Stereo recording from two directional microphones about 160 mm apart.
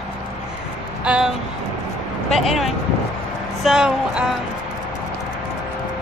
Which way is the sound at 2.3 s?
Centre (ahead or behind).